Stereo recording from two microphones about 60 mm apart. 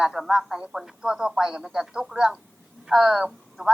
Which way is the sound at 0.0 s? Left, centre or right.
Centre.